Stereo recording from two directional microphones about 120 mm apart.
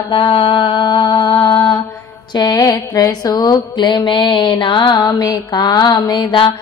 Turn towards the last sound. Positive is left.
turn(degrees=35)  # may be behind; listen again after turning